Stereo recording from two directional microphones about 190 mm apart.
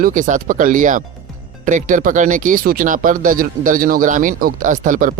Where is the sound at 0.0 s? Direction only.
45° right (ahead or behind).